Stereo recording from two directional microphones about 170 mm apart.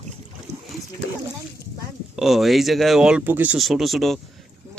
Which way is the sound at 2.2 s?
Centre (ahead or behind).